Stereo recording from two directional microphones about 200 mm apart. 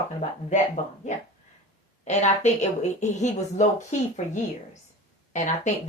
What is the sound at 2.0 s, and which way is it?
Speech, 35° left (ahead or behind).